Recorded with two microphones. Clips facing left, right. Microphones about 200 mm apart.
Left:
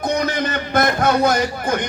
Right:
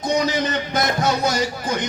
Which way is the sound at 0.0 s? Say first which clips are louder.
Even; 55° left (ahead or behind).